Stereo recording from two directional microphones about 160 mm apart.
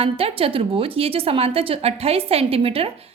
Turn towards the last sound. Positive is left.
turn(degrees=-35)  # may be behind; listen again after turning